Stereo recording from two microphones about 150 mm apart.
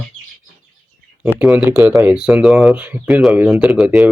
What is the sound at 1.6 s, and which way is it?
Speech, 20° right (ahead or behind).